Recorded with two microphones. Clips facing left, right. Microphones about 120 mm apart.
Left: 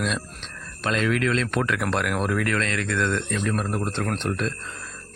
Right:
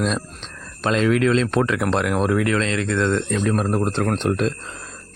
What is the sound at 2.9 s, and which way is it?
Speech, 40° right (ahead or behind).